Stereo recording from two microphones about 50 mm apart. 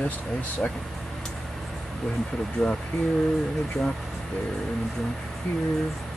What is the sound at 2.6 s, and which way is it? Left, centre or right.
Speech, centre.